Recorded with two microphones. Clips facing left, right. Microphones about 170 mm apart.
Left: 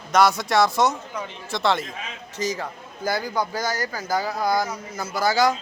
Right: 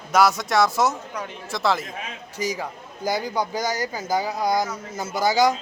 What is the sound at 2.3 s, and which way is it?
A man's voice, 10° right (ahead or behind).